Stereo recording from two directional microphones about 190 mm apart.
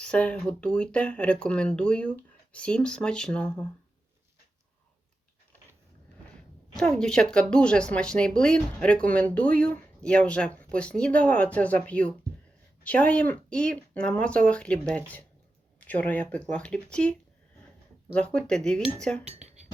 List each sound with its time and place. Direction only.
0.0 s speech: 5° left (ahead or behind)
6.7 s speech: centre (ahead or behind)